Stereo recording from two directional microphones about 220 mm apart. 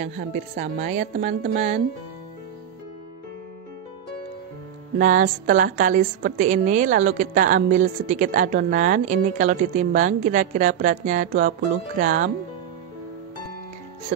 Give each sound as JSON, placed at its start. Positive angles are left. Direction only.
{"t": 0.0, "sound": "a woman's voice", "side_deg": -35}
{"t": 4.9, "sound": "a woman's voice", "side_deg": -35}